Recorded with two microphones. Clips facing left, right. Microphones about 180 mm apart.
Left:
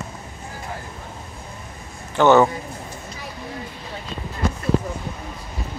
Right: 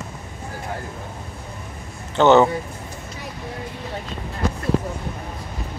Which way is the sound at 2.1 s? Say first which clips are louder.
Right 1 dB; 20° right (ahead or behind).